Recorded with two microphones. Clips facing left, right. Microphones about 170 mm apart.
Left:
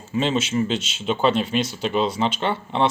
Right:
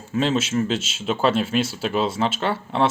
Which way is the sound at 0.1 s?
Centre (ahead or behind).